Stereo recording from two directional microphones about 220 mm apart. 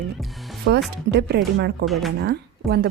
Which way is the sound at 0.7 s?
55° right (ahead or behind).